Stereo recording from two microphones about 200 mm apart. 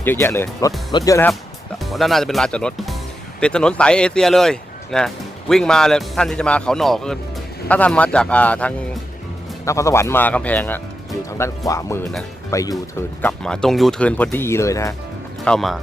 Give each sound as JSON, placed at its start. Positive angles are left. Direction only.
{"t": 0.0, "sound": "speech", "side_deg": 10}
{"t": 1.8, "sound": "speech", "side_deg": 0}
{"t": 13.2, "sound": "speech", "side_deg": 5}
{"t": 15.4, "sound": "speech", "side_deg": 0}